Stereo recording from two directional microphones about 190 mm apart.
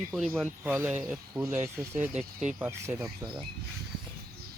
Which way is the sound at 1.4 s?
15° right (ahead or behind).